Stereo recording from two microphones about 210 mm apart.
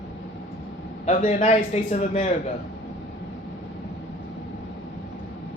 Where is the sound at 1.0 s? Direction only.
35° left (ahead or behind).